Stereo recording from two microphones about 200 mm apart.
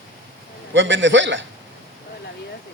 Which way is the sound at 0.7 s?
65° right (ahead or behind).